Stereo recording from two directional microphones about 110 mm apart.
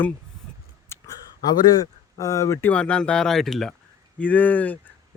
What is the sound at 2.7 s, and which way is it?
Speech, 10° left (ahead or behind).